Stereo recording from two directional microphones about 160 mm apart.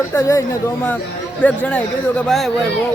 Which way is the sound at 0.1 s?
20° left (ahead or behind).